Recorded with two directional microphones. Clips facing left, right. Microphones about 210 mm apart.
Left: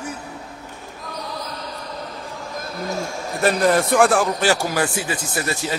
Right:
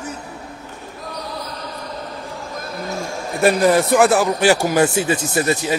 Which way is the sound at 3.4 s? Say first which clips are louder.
Right 3 dB; 10° right (ahead or behind).